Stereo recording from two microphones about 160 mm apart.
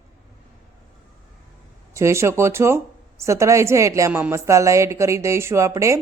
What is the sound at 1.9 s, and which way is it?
A woman's voice, 20° right (ahead or behind).